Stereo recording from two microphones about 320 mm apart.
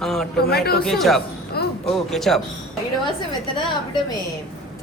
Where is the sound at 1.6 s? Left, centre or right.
Left.